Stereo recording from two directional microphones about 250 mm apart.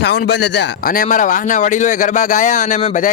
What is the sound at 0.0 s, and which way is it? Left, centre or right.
Speech, left.